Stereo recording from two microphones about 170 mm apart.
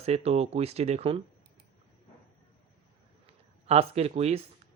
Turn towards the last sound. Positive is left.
turn(degrees=-40)  # may be behind; listen again after turning